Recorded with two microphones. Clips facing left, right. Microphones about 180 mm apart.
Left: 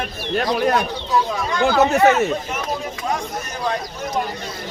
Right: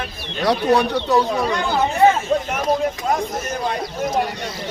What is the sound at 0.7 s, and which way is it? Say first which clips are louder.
Speech: right 4 dB; 70° right (ahead or behind).